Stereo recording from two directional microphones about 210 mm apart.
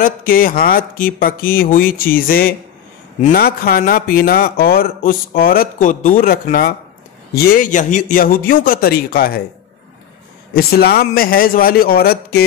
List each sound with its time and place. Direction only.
0.0 s speech: 40° left (ahead or behind)
10.5 s speech: 45° left (ahead or behind)